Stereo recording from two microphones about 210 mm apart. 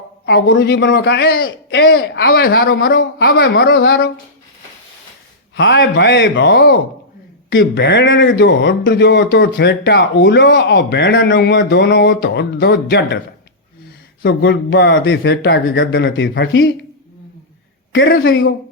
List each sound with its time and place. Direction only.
0.3 s a man's voice: 50° left (ahead or behind)
5.5 s speech: 55° left (ahead or behind)
17.9 s speech: 60° left (ahead or behind)